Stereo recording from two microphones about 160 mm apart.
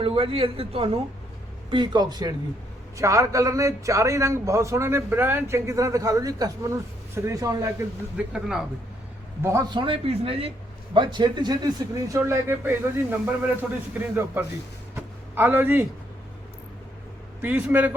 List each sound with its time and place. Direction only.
0.0 s a man's voice: 35° right (ahead or behind)
8.1 s speech: 5° right (ahead or behind)
9.4 s a man's voice: 15° right (ahead or behind)
9.6 s a man's voice: 30° right (ahead or behind); by 15.9 s 10° right (ahead or behind)
17.4 s a man's voice: 10° right (ahead or behind)